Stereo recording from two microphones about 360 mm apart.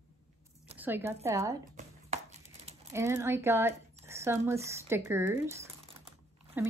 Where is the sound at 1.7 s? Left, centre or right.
Centre.